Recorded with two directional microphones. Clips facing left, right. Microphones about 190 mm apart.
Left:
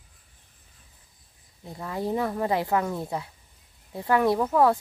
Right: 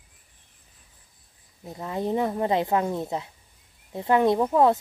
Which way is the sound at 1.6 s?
20° right (ahead or behind).